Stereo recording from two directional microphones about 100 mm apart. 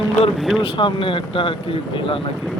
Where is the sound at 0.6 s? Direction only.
60° left (ahead or behind).